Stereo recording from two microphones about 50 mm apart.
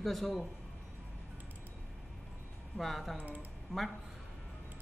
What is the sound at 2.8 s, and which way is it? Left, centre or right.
Speech, centre.